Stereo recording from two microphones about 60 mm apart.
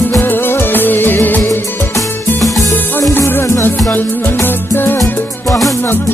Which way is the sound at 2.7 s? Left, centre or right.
Left.